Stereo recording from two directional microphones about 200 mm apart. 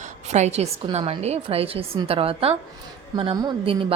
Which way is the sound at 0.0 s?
35° right (ahead or behind).